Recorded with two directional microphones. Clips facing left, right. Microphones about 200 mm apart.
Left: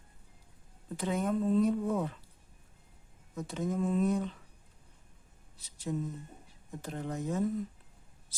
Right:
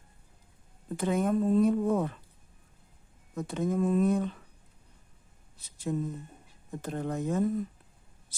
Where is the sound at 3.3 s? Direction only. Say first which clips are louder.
Right 4 dB; 55° right (ahead or behind).